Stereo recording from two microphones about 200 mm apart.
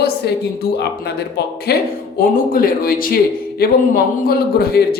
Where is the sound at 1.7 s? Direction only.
55° left (ahead or behind).